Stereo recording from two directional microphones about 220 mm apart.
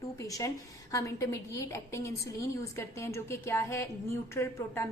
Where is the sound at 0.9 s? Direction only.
15° left (ahead or behind).